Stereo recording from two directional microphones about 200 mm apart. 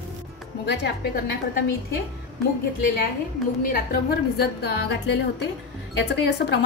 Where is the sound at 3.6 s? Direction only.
50° left (ahead or behind).